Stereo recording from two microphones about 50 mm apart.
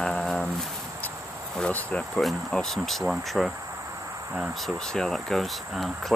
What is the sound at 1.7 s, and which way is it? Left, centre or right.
Speech, left.